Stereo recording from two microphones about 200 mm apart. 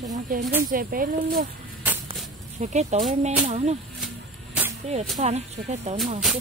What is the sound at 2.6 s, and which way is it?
Speech, 35° right (ahead or behind).